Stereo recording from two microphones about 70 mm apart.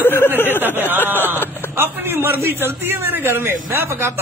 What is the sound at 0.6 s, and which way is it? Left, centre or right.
Speech, right.